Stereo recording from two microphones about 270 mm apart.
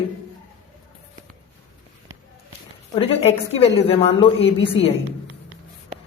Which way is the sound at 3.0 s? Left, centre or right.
Left.